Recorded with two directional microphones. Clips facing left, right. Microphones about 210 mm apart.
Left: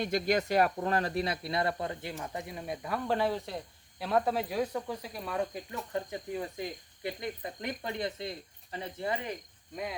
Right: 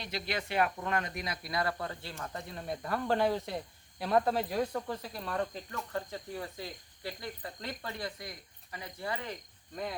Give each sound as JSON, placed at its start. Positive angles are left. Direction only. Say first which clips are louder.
{"t": 0.0, "sound": "speech", "louder": "left 8 dB", "side_deg": 45}